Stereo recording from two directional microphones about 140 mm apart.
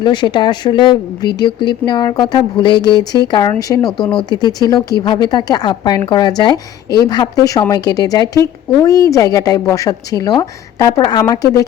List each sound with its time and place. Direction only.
0.0 s a woman's voice: 35° left (ahead or behind)